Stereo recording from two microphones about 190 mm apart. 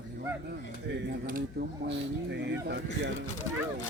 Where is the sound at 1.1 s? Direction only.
50° right (ahead or behind).